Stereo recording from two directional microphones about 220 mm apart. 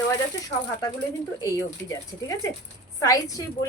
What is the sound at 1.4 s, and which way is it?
Speech, 15° left (ahead or behind).